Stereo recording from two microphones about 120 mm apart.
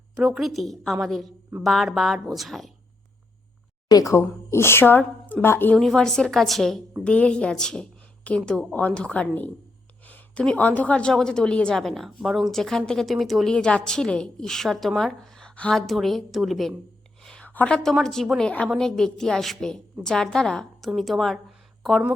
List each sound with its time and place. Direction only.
0.2 s a woman's voice: centre (ahead or behind)
3.8 s speech: 30° left (ahead or behind)
5.7 s a woman's voice: centre (ahead or behind)
17.2 s a woman's voice: 10° left (ahead or behind)